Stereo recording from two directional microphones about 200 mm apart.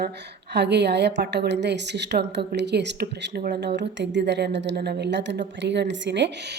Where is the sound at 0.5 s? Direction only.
55° right (ahead or behind).